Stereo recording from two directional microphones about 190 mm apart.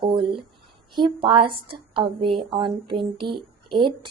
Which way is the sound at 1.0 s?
25° right (ahead or behind).